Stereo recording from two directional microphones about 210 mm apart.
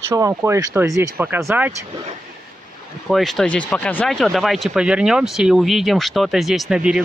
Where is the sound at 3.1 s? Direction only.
Centre (ahead or behind).